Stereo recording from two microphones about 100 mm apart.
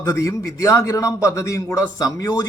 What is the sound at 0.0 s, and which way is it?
A man's voice, 30° left (ahead or behind).